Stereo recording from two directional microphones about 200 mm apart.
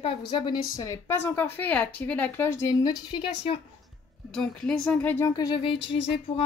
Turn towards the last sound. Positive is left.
turn(degrees=25)  # may be behind; listen again after turning